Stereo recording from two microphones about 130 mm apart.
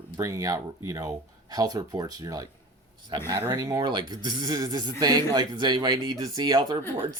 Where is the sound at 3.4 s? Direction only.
25° right (ahead or behind).